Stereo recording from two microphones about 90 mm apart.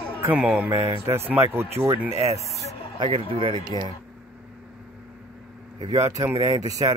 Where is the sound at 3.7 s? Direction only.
90° right.